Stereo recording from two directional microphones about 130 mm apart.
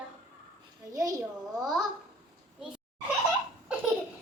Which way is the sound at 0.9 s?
25° right (ahead or behind).